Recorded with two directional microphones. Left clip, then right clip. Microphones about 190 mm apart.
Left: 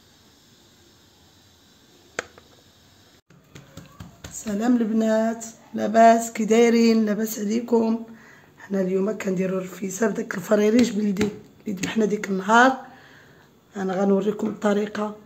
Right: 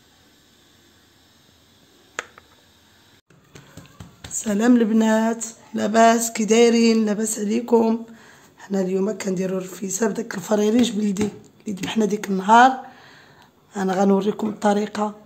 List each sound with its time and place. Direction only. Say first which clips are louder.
4.3 s a woman's voice: right 5 dB; 45° right (ahead or behind); by 9.4 s 20° right (ahead or behind)
9.4 s speech: even; 30° right (ahead or behind)
9.9 s a woman's voice: right 1 dB; 20° right (ahead or behind)